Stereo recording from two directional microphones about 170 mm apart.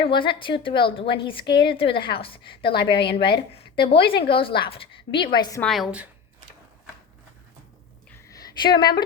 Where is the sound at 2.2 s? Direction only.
30° left (ahead or behind).